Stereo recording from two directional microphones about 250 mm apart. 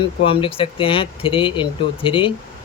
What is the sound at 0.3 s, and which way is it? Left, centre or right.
Speech, left.